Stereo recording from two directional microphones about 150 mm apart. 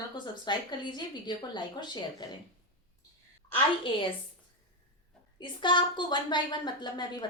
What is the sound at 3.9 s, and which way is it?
Speech, 35° left (ahead or behind).